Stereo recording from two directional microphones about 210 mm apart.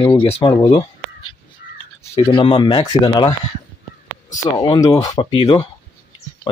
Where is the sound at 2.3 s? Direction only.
25° left (ahead or behind).